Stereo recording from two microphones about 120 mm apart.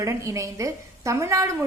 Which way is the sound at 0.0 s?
25° right (ahead or behind).